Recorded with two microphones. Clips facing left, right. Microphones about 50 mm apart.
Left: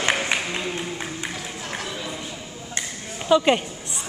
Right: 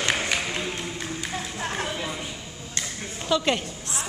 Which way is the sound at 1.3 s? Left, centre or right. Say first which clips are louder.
Right 2 dB; right.